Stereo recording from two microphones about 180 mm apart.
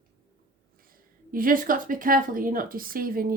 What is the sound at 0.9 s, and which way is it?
Speech, 50° right (ahead or behind).